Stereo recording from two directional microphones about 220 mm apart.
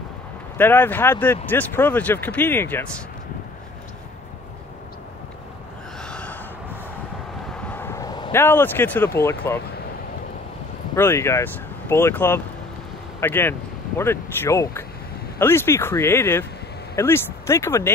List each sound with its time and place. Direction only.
0.6 s speech: 10° left (ahead or behind)
5.9 s gasp: 5° left (ahead or behind)
7.7 s speech: 10° left (ahead or behind)
11.0 s speech: 10° left (ahead or behind)